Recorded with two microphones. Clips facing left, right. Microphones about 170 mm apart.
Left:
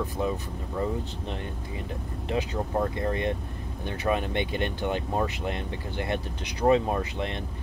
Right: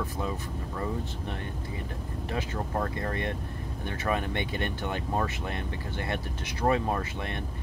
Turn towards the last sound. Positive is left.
turn(degrees=20)  # may be behind; listen again after turning